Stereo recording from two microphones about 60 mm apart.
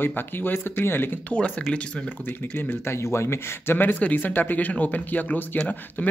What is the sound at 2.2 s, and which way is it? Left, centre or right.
Speech, left.